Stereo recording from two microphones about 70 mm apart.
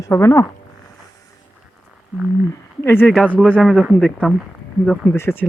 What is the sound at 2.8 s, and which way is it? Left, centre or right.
Speech, left.